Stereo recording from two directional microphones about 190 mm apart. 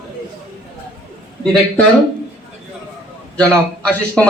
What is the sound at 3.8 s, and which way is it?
Speech, 5° left (ahead or behind).